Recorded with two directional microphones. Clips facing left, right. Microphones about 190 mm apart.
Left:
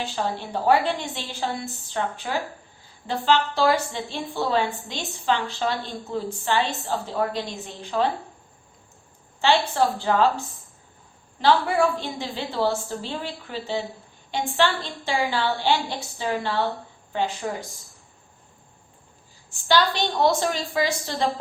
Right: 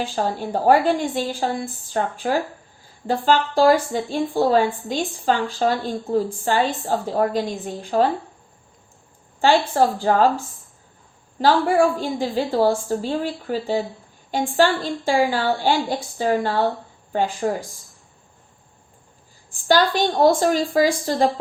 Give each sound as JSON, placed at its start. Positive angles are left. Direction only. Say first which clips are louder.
{"t": 0.0, "sound": "speech", "louder": "right 4 dB", "side_deg": -45}
{"t": 9.4, "sound": "speech", "louder": "right 4 dB", "side_deg": -45}
{"t": 11.3, "sound": "speech", "louder": "right 3 dB", "side_deg": -45}
{"t": 19.6, "sound": "speech", "louder": "right 4 dB", "side_deg": -45}